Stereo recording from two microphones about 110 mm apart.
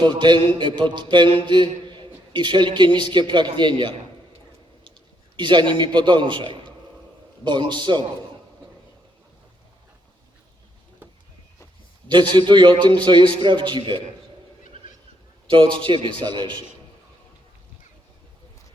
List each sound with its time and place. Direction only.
0.0 s a man's voice: 45° right (ahead or behind)
5.4 s a man's voice: 45° right (ahead or behind)
12.0 s a man's voice: 45° right (ahead or behind)
15.4 s a man's voice: 50° right (ahead or behind)